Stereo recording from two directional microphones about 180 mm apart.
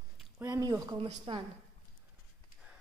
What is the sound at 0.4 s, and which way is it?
Speech, 20° right (ahead or behind).